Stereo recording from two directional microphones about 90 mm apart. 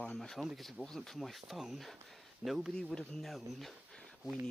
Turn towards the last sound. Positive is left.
turn(degrees=0)  # may be behind; listen again after turning